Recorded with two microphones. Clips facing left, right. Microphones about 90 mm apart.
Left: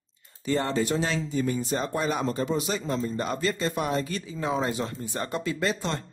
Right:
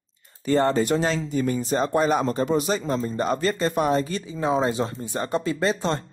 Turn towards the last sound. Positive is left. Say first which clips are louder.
# right 5 dB
turn(degrees=-35)  # may be behind; listen again after turning